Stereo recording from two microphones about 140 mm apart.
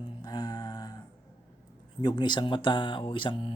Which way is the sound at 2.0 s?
35° left (ahead or behind).